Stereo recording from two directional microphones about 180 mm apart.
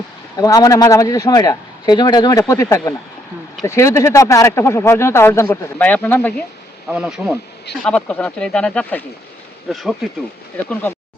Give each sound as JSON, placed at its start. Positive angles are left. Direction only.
{"t": 0.3, "sound": "a man's voice", "side_deg": 20}
{"t": 6.8, "sound": "speech", "side_deg": -5}
{"t": 7.9, "sound": "speech", "side_deg": 5}